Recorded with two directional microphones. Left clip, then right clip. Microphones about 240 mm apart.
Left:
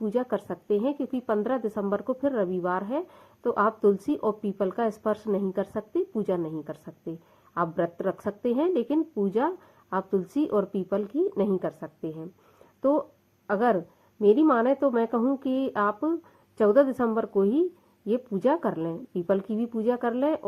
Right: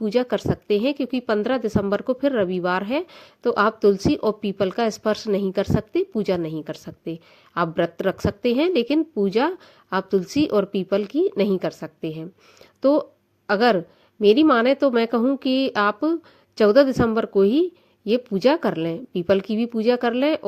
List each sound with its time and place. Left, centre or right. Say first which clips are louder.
0.0 s a woman's voice: right 6 dB; right